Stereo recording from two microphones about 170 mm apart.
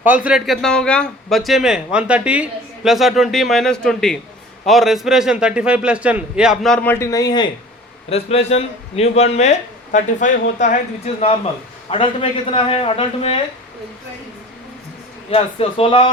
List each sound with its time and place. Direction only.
0.0 s a man's voice: 10° right (ahead or behind)
6.8 s speech: 15° left (ahead or behind)
8.1 s speech: 35° left (ahead or behind)
15.3 s speech: 35° left (ahead or behind)